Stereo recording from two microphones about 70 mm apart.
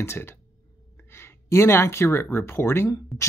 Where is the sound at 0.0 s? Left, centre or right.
Left.